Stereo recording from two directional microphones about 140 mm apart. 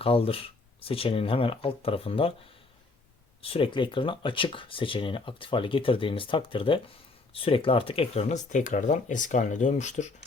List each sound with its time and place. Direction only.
0.0 s speech: 45° left (ahead or behind)
3.4 s speech: 40° left (ahead or behind); by 10.1 s 55° left (ahead or behind)